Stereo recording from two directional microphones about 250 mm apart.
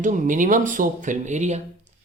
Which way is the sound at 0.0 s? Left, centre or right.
Right.